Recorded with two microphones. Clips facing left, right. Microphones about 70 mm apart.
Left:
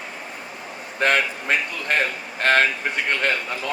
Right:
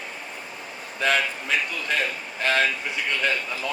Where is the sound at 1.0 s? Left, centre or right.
Left.